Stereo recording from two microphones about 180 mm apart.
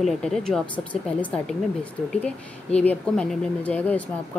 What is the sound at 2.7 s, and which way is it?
Speech, 5° left (ahead or behind).